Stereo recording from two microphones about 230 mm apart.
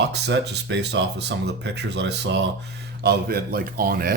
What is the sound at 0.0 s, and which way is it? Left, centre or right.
Speech, right.